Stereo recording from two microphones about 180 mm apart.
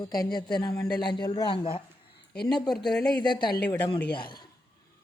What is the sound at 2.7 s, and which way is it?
Speech, 5° left (ahead or behind).